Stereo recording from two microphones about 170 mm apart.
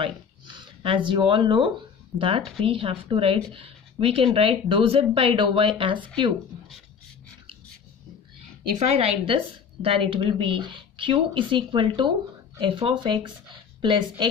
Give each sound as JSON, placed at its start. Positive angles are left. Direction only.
{"t": 0.0, "sound": "speech", "side_deg": -30}
{"t": 8.9, "sound": "a woman's voice", "side_deg": -35}